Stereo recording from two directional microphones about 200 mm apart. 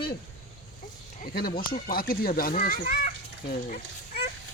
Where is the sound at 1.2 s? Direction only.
45° left (ahead or behind).